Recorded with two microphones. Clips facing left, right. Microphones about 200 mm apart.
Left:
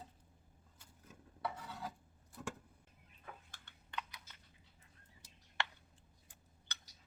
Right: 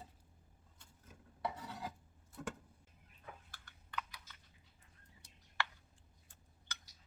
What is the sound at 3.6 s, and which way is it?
Computer keyboard, 25° left (ahead or behind).